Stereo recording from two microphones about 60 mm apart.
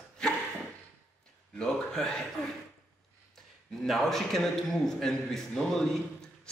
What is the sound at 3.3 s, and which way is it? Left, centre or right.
A man's voice, centre.